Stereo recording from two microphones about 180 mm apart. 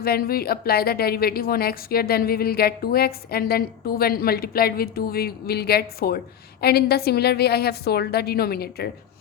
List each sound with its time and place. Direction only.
0.0 s a woman's voice: 55° left (ahead or behind)